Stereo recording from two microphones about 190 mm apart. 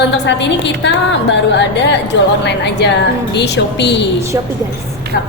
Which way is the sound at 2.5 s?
65° left (ahead or behind).